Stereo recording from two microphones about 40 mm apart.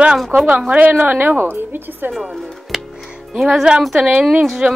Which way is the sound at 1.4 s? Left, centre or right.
Right.